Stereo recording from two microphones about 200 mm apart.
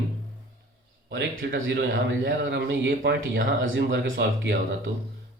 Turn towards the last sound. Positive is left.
turn(degrees=-65)  # may be behind; listen again after turning